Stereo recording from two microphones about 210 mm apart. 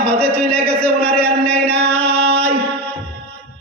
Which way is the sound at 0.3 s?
30° right (ahead or behind).